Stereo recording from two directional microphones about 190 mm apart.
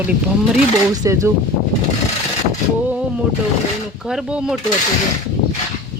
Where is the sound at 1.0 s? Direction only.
15° right (ahead or behind).